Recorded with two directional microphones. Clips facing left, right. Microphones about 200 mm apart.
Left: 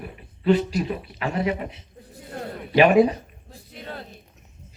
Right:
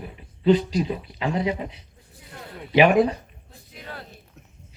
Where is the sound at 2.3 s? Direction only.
45° left (ahead or behind).